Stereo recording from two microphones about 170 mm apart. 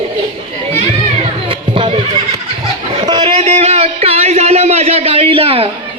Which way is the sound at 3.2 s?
40° right (ahead or behind).